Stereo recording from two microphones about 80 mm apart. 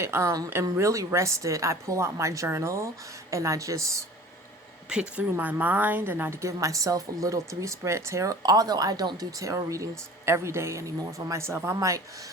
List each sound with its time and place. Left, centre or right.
0.0 s a woman's voice: right
4.9 s speech: centre
6.4 s a woman's voice: right